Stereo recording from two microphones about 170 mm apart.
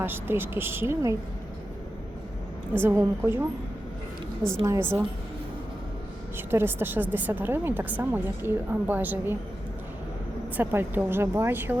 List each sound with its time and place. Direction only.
0.0 s a woman's voice: 15° right (ahead or behind)
2.8 s a woman's voice: 15° right (ahead or behind)
4.4 s a woman's voice: 20° right (ahead or behind)
6.3 s a woman's voice: 15° right (ahead or behind)
10.6 s a woman's voice: 15° right (ahead or behind)